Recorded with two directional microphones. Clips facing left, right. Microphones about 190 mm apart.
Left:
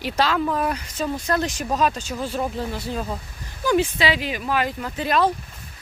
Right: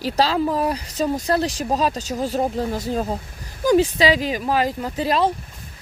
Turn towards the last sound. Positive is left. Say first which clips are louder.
# right 1 dB
turn(degrees=-35)  # may be behind; listen again after turning